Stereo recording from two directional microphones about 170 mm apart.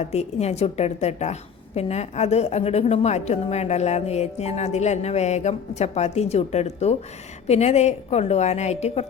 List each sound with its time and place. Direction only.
0.0 s a woman's voice: 40° left (ahead or behind)